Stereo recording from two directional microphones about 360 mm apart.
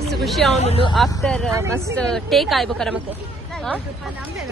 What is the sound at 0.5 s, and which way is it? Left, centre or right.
Speech, centre.